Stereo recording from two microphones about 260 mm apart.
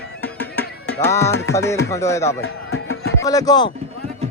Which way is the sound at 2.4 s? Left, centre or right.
Left.